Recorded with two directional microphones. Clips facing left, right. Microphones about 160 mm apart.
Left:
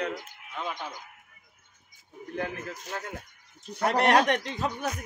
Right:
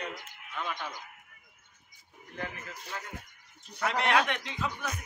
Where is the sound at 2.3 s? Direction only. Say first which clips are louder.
Left 6 dB; 45° left (ahead or behind).